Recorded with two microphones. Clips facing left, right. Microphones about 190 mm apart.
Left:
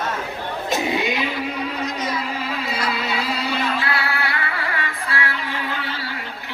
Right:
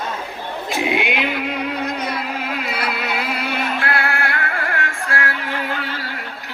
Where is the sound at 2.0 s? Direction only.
60° right (ahead or behind); by 6.0 s 45° right (ahead or behind).